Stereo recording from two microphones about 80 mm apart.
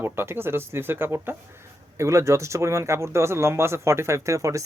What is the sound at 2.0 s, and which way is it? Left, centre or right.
Speech, right.